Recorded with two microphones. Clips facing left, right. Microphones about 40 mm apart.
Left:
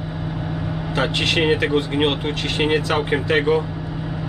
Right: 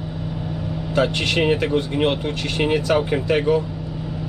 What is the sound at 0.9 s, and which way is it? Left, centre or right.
Speech, left.